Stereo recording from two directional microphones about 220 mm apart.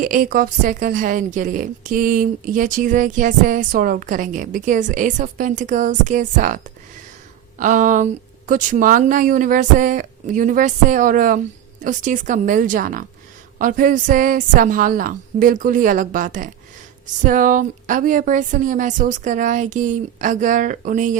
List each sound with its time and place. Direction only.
0.0 s a woman's voice: 40° right (ahead or behind)
7.6 s a woman's voice: 35° right (ahead or behind)